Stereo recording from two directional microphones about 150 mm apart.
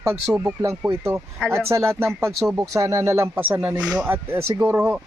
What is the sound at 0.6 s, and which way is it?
Speech, 20° right (ahead or behind).